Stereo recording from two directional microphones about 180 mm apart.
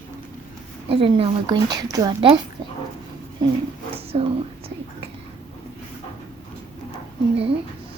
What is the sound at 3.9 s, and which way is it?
Speech, 35° right (ahead or behind).